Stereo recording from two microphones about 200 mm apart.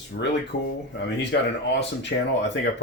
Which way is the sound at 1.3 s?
60° left (ahead or behind).